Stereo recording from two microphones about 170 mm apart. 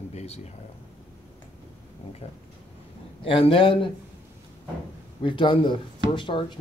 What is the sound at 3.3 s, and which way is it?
Speech, 30° left (ahead or behind).